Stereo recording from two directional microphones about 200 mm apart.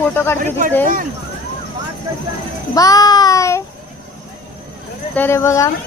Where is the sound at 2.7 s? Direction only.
20° left (ahead or behind).